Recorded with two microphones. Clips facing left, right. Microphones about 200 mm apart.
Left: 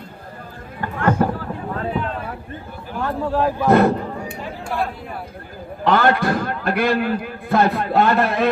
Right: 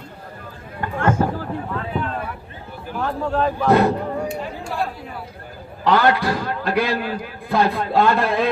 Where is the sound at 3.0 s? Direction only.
5° left (ahead or behind).